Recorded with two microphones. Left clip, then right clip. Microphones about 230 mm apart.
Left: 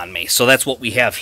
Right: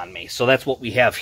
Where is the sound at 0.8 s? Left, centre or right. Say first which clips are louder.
Left 1 dB; left.